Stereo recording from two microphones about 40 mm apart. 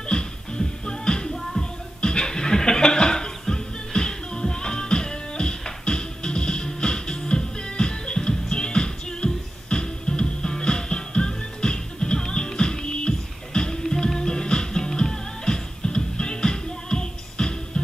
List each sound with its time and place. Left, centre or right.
0.0 s music: left
1.6 s chuckle: left